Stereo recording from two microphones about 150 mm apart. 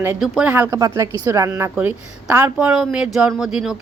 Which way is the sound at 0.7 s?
20° right (ahead or behind).